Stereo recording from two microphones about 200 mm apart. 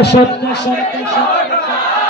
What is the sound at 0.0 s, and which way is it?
Speech, 55° left (ahead or behind).